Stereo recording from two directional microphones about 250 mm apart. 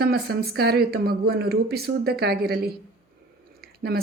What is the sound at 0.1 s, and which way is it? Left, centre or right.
Speech, right.